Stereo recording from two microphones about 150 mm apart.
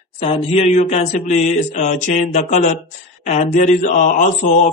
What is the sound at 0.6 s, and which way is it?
Mantra, 50° left (ahead or behind).